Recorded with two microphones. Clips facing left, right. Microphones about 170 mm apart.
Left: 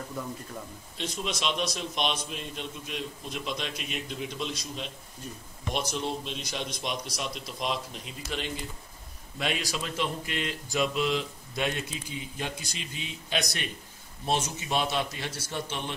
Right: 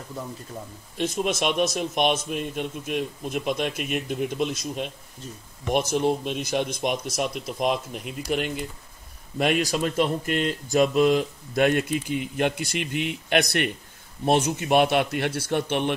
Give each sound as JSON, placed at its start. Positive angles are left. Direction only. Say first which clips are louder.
{"t": 0.9, "sound": "speech", "louder": "right 9 dB", "side_deg": -50}
{"t": 9.4, "sound": "a man's voice", "louder": "right 9 dB", "side_deg": -50}